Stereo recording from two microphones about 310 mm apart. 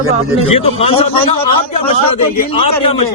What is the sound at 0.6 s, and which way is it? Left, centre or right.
A man's voice, centre.